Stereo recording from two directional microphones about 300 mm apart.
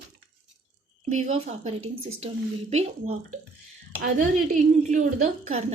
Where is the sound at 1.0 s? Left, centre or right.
Right.